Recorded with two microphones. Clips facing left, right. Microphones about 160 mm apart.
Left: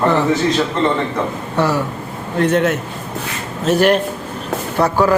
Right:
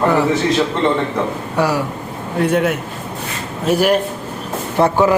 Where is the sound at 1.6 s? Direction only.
10° right (ahead or behind).